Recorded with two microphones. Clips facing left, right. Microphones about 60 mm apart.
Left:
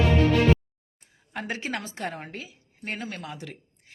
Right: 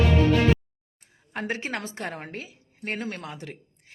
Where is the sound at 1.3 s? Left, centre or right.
Right.